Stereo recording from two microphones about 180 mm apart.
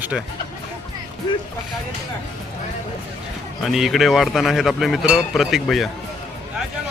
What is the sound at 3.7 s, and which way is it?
Speech, centre (ahead or behind).